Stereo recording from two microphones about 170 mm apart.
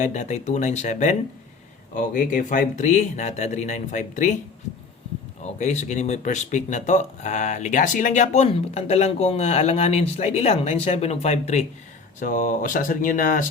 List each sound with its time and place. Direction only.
0.0 s speech: 45° left (ahead or behind)
5.4 s speech: 45° left (ahead or behind)
12.2 s speech: 50° left (ahead or behind)